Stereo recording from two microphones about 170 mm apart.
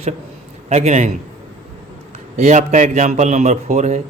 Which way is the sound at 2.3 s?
40° right (ahead or behind).